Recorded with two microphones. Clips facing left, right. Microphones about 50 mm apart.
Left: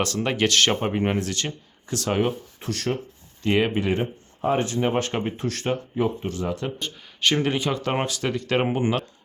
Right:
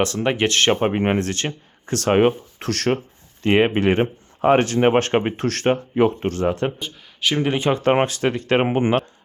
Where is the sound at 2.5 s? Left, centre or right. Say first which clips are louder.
Right 6 dB; right.